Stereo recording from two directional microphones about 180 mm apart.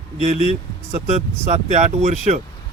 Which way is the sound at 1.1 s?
40° right (ahead or behind).